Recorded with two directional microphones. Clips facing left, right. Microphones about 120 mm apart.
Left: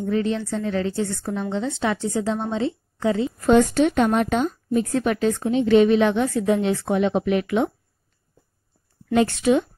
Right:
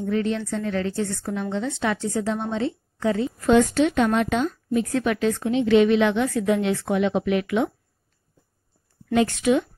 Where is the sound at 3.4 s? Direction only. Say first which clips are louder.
Left 1 dB; 45° left (ahead or behind).